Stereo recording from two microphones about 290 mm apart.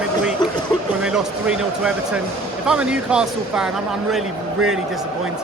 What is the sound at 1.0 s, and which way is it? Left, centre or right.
Speech, centre.